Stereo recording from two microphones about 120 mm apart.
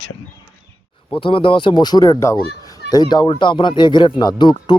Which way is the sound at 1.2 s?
45° left (ahead or behind).